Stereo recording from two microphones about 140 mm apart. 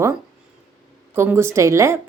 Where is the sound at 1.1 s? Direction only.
15° right (ahead or behind).